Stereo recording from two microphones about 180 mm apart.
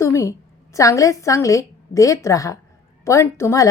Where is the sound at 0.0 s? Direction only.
15° left (ahead or behind).